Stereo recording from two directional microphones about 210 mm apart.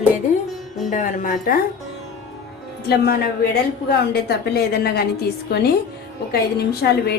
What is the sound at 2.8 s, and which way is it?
A woman's voice, 50° left (ahead or behind).